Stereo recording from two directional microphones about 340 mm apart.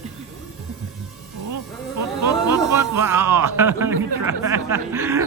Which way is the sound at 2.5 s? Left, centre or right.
Centre.